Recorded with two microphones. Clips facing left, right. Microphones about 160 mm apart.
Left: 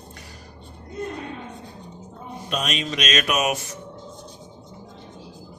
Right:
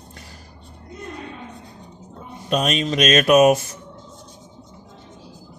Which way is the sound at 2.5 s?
40° right (ahead or behind).